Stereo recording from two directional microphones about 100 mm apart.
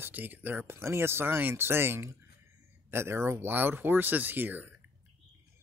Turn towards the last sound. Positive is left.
turn(degrees=-20)  # may be behind; listen again after turning